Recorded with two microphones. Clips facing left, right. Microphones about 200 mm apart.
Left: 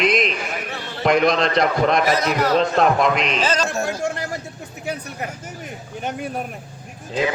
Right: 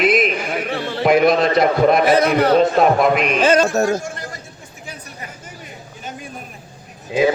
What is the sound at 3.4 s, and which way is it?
Speech, 55° right (ahead or behind).